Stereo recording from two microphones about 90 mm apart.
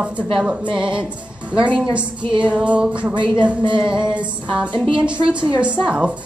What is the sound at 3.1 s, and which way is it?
Speech, 65° right (ahead or behind).